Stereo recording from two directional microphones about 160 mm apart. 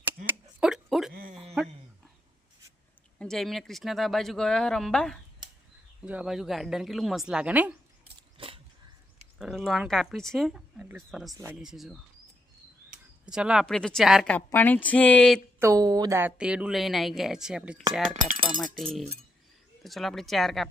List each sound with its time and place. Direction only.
0.3 s a sound: 5° right (ahead or behind)
3.2 s a woman's voice: centre (ahead or behind)
8.4 s a sound: 35° right (ahead or behind)
9.4 s a woman's voice: centre (ahead or behind)
13.2 s a woman's voice: 5° right (ahead or behind)
14.3 s speech: 10° left (ahead or behind)
15.5 s a woman's voice: 20° right (ahead or behind); by 20.7 s centre (ahead or behind)